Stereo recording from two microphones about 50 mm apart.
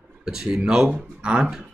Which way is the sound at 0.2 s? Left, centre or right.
Centre.